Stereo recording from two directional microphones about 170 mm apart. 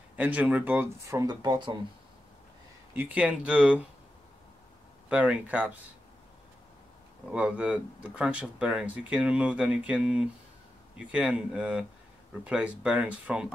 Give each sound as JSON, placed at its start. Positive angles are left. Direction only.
{"t": 0.1, "sound": "speech", "side_deg": -10}
{"t": 1.2, "sound": "speech", "side_deg": -25}
{"t": 2.9, "sound": "speech", "side_deg": -10}
{"t": 5.1, "sound": "speech", "side_deg": -5}
{"t": 7.2, "sound": "speech", "side_deg": -5}